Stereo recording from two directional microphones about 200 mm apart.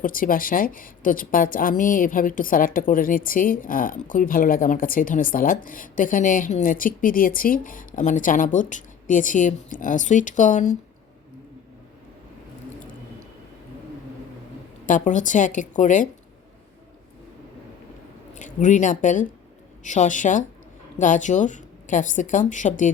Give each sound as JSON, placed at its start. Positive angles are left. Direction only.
{"t": 0.0, "sound": "a woman's voice", "side_deg": 45}
{"t": 14.8, "sound": "a woman's voice", "side_deg": 40}
{"t": 18.3, "sound": "a woman's voice", "side_deg": 40}